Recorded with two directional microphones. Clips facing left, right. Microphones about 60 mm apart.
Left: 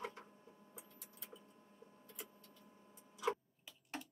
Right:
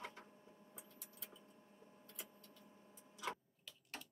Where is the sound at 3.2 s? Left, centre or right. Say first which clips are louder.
Left 7 dB; centre.